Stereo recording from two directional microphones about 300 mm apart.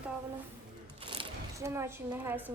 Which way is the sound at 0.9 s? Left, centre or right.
Centre.